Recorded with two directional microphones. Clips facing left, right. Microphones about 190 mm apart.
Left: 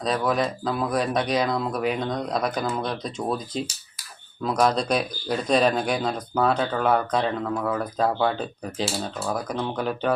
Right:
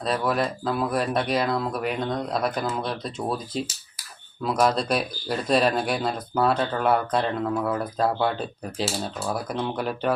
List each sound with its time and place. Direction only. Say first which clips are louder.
0.0 s speech: left 1 dB; centre (ahead or behind)